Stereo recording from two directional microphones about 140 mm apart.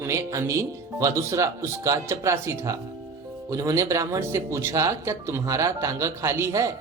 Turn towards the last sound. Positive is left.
turn(degrees=-20)  # may be behind; listen again after turning